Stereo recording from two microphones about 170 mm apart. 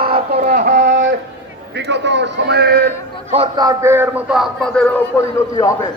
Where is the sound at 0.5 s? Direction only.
70° right (ahead or behind).